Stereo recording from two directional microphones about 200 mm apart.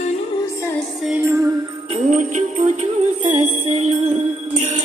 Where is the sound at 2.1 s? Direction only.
40° right (ahead or behind).